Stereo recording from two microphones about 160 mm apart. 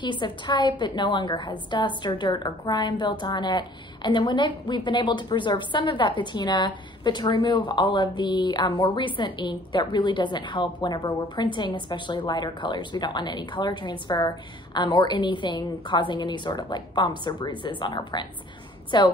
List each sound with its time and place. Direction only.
0.0 s a woman's voice: 30° left (ahead or behind)